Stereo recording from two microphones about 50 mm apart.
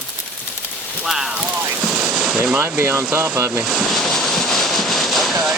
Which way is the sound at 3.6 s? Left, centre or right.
Centre.